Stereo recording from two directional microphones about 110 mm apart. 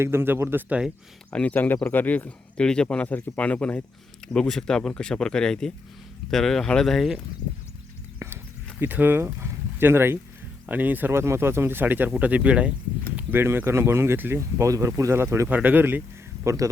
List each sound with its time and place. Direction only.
0.0 s speech: 20° right (ahead or behind)
1.3 s speech: 15° left (ahead or behind)
8.8 s speech: 20° right (ahead or behind)
15.4 s speech: 15° right (ahead or behind)